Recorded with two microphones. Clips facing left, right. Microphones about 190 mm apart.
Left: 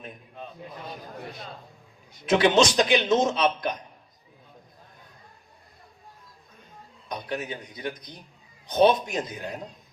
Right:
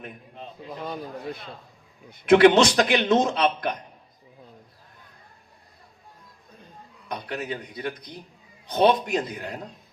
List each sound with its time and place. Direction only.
2.0 s a man's voice: 55° right (ahead or behind)
7.1 s a man's voice: 60° right (ahead or behind)